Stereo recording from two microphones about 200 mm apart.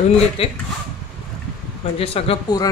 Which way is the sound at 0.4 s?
30° left (ahead or behind).